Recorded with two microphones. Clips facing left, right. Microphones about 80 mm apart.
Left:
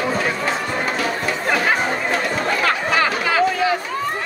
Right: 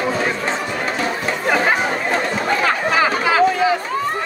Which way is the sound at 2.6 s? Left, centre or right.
Centre.